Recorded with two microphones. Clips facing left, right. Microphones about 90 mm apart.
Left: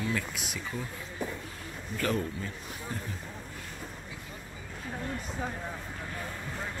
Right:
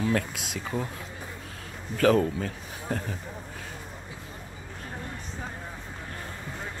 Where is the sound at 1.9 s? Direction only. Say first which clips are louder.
Right 9 dB; 85° right.